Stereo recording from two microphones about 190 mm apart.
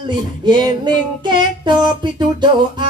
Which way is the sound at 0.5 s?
25° right (ahead or behind).